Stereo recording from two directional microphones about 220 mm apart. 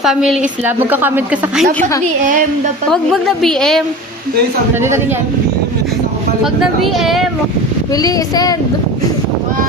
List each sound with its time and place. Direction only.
0.0 s a woman's voice: centre (ahead or behind)
2.9 s a woman's voice: centre (ahead or behind)
4.7 s a man's voice: 10° right (ahead or behind)
6.4 s a woman's voice: centre (ahead or behind)
7.9 s child singing: 15° left (ahead or behind)